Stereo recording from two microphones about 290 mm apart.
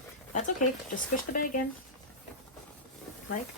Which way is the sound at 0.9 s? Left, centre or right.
Left.